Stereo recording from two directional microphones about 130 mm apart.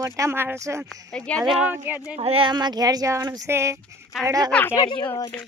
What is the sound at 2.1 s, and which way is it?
Speech, 50° right (ahead or behind).